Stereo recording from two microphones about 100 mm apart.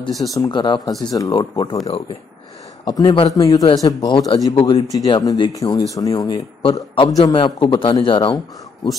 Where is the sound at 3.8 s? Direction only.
50° left (ahead or behind).